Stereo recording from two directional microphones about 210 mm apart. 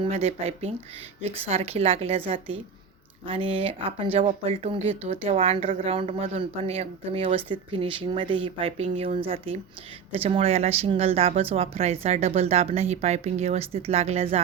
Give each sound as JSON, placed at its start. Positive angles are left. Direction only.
{"t": 0.0, "sound": "speech", "side_deg": -30}